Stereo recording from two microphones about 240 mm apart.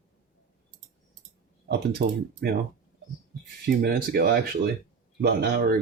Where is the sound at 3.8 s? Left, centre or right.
Right.